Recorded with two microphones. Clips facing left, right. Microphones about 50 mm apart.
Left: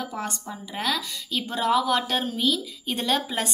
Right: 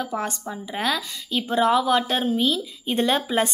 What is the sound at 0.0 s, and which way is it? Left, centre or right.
Speech, right.